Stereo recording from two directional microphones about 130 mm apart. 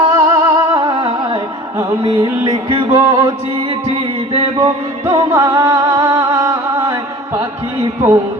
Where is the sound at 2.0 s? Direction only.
40° right (ahead or behind).